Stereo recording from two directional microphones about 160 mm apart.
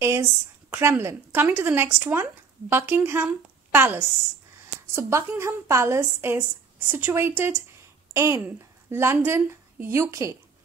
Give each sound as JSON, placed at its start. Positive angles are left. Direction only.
{"t": 0.0, "sound": "a woman's voice", "side_deg": -15}